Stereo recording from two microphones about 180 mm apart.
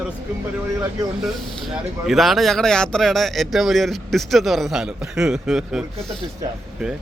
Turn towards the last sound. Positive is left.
turn(degrees=0)  # may be behind; listen again after turning